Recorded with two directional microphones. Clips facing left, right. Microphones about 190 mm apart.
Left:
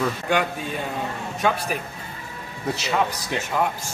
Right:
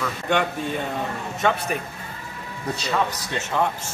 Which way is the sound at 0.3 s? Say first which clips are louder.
Right 5 dB; 5° left (ahead or behind).